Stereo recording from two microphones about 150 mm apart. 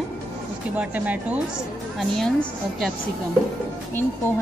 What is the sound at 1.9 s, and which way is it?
Speech, centre (ahead or behind).